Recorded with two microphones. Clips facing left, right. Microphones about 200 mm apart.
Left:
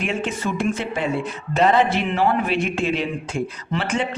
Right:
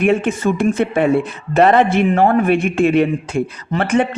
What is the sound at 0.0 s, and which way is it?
Speech, 55° right (ahead or behind).